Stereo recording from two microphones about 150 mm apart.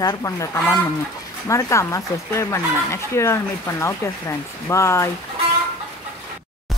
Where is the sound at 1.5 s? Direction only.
20° left (ahead or behind).